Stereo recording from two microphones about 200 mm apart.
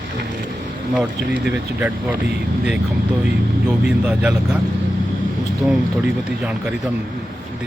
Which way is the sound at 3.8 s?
5° right (ahead or behind).